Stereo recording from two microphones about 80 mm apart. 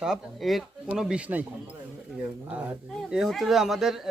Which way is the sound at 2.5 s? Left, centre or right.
Centre.